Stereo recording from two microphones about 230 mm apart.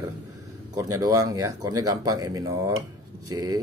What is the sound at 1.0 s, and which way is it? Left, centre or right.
Speech, centre.